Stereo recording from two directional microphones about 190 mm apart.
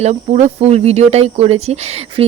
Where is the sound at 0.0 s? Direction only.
35° right (ahead or behind).